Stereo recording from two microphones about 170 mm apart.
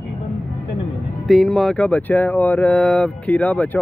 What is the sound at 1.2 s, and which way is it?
Speech, centre (ahead or behind).